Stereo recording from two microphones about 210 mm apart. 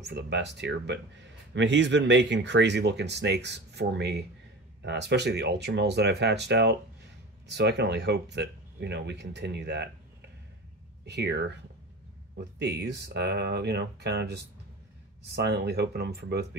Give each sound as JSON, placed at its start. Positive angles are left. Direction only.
{"t": 0.0, "sound": "speech", "side_deg": -55}
{"t": 11.1, "sound": "speech", "side_deg": -55}
{"t": 12.5, "sound": "speech", "side_deg": -55}